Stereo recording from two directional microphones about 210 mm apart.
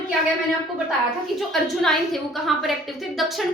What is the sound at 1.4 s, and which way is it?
A woman's voice, centre (ahead or behind).